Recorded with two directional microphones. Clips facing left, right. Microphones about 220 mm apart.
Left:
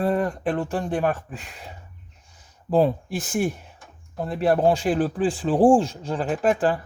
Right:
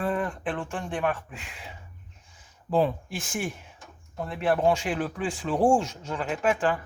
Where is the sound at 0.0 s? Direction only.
40° left (ahead or behind).